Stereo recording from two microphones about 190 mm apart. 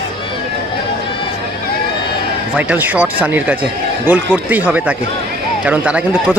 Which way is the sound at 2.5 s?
10° right (ahead or behind).